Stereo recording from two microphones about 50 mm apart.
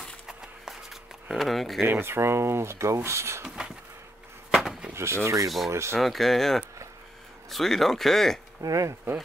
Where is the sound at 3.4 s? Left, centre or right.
Centre.